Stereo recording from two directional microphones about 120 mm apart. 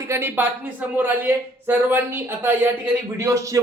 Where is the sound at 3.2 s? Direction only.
30° right (ahead or behind).